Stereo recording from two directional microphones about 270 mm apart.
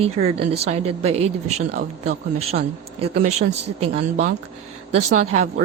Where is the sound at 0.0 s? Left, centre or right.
Right.